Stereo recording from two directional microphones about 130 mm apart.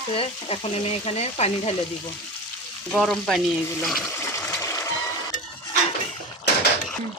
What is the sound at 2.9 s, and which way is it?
Frying, 5° left (ahead or behind).